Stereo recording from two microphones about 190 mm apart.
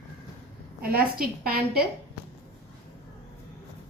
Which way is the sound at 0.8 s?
50° right (ahead or behind).